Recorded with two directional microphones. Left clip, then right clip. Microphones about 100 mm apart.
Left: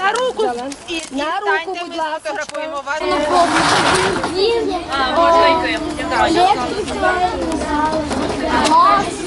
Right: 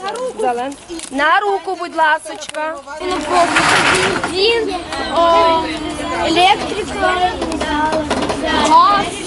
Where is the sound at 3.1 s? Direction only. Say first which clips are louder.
Right 1 dB; centre (ahead or behind).